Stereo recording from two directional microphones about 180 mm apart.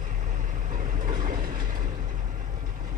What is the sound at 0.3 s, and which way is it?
Vehicle, 45° right (ahead or behind).